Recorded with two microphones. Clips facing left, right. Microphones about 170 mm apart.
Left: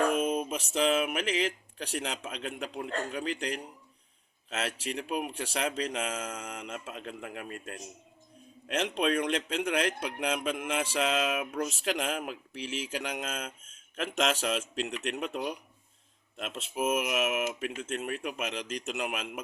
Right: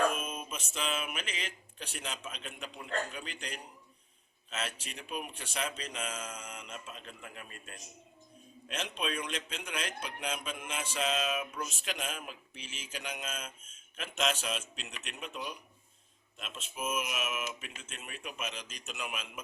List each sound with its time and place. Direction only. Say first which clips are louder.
0.1 s speech: left 10 dB; 65° left (ahead or behind)
8.6 s speech: left 8 dB; 70° left (ahead or behind)
16.4 s speech: left 8 dB; 75° left (ahead or behind)